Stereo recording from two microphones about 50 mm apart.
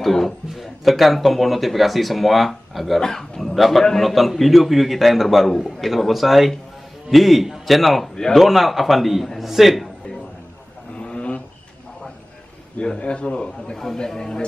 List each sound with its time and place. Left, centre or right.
0.0 s a man's voice: centre
8.4 s a man's voice: centre
11.0 s a sound: centre
12.7 s a man's voice: left
13.7 s speech: centre